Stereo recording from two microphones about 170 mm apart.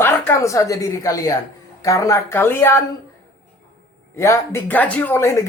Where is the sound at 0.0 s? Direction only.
15° left (ahead or behind).